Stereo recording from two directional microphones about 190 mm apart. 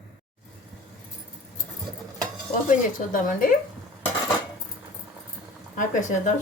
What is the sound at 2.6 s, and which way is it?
Speech, 45° left (ahead or behind).